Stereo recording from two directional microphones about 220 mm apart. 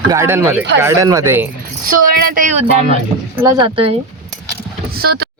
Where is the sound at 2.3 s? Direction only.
30° right (ahead or behind).